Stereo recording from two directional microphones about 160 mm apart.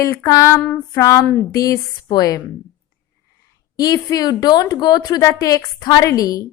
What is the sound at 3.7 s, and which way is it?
Speech, 25° left (ahead or behind).